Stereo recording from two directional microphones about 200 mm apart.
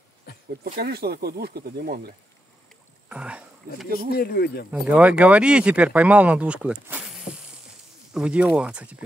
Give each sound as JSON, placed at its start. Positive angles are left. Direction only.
{"t": 0.7, "sound": "speech", "side_deg": -50}
{"t": 3.1, "sound": "speech", "side_deg": -5}
{"t": 4.2, "sound": "speech", "side_deg": 50}
{"t": 4.6, "sound": "speech", "side_deg": -5}